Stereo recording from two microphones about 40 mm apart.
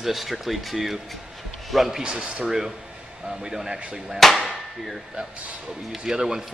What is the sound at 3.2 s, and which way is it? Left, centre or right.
Speech, centre.